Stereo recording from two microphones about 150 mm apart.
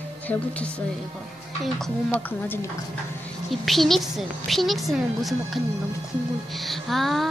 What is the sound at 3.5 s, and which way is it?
A woman's voice, centre (ahead or behind).